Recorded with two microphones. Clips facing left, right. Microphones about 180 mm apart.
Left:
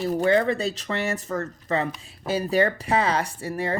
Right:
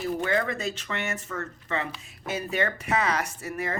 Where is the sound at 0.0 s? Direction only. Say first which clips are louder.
Left 6 dB; 35° left (ahead or behind).